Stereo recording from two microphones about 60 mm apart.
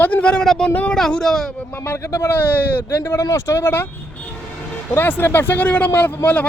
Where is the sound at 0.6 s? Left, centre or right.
Left.